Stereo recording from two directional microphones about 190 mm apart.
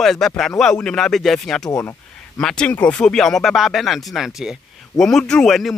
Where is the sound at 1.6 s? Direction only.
20° left (ahead or behind).